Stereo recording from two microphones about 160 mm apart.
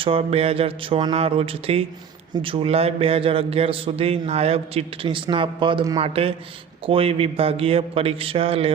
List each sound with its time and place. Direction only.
0.0 s a man's voice: 35° right (ahead or behind)
6.0 s a man's voice: 35° right (ahead or behind)